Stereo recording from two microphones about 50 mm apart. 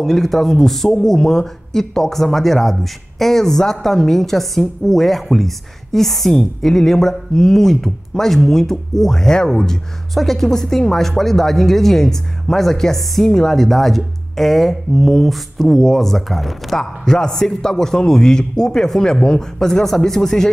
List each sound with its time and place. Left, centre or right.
0.0 s a woman's voice: centre